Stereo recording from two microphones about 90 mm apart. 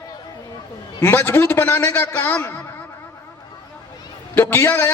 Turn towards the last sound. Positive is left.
turn(degrees=25)  # may be behind; listen again after turning